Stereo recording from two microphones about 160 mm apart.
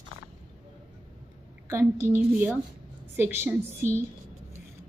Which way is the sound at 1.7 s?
15° right (ahead or behind).